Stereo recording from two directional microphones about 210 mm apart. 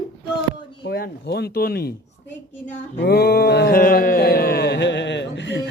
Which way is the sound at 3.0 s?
50° left (ahead or behind).